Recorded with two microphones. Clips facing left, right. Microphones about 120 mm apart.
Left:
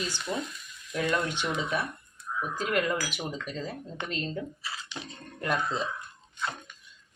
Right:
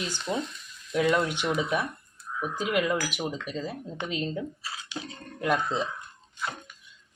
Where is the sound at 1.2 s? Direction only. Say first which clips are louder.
Right 2 dB; 15° right (ahead or behind).